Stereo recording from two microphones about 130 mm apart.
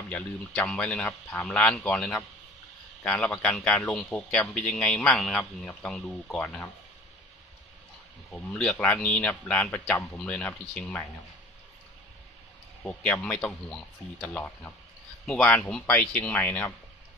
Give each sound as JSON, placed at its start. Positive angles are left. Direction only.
{"t": 0.1, "sound": "a man's voice", "side_deg": 5}
{"t": 8.5, "sound": "a man's voice", "side_deg": 10}
{"t": 13.0, "sound": "a man's voice", "side_deg": 10}